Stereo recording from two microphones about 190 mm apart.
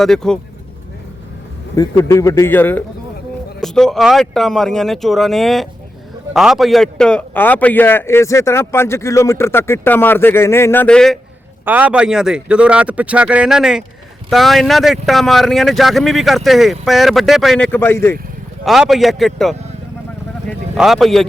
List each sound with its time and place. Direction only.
0.0 s speech: 5° left (ahead or behind)
1.7 s a man's voice: 15° left (ahead or behind)
11.6 s speech: 10° right (ahead or behind); by 18.2 s 10° left (ahead or behind)
18.6 s speech: centre (ahead or behind)
20.7 s speech: centre (ahead or behind)